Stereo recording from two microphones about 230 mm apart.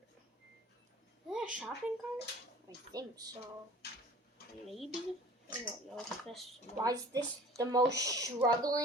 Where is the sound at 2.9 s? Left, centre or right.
Centre.